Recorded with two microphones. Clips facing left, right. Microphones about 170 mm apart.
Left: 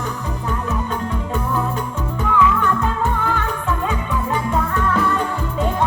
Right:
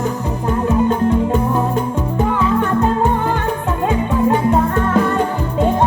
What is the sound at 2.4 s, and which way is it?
Music, 35° right (ahead or behind).